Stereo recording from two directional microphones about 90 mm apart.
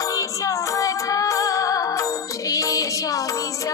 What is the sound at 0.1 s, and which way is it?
Music, 35° left (ahead or behind).